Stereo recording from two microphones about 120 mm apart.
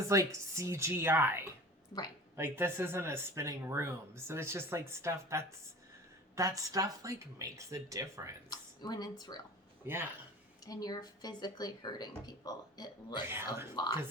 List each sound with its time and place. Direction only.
0.1 s speech: 25° right (ahead or behind)
8.4 s a woman's voice: 35° left (ahead or behind)
9.8 s speech: 20° right (ahead or behind)
10.7 s speech: 30° left (ahead or behind)
13.2 s speech: 20° right (ahead or behind)